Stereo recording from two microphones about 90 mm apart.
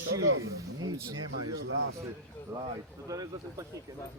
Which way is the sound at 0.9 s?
45° right (ahead or behind).